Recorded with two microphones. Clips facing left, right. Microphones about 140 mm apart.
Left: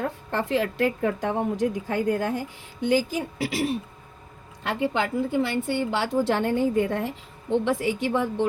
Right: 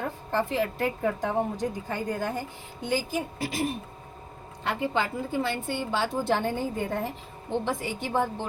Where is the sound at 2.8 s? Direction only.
90° left.